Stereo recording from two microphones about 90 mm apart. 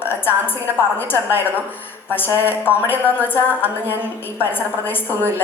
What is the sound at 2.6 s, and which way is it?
A woman's voice, 20° left (ahead or behind).